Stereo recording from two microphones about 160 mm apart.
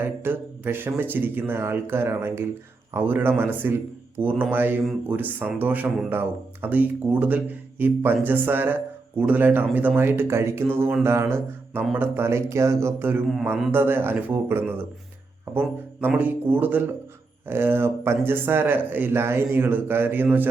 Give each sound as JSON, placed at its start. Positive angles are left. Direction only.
{"t": 0.0, "sound": "speech", "side_deg": -15}